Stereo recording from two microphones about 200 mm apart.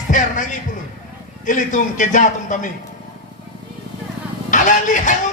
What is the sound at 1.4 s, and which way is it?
Speech, 40° left (ahead or behind).